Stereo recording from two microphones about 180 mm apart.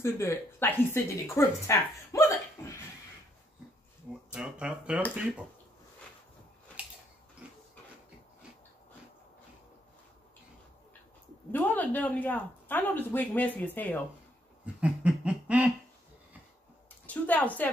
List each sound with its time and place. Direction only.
0.0 s a woman's voice: 15° left (ahead or behind)
4.3 s speech: 5° right (ahead or behind)
7.4 s printer: 5° right (ahead or behind)
11.5 s a woman's voice: 10° left (ahead or behind)
14.8 s a sound: 5° right (ahead or behind)
17.0 s speech: 10° left (ahead or behind)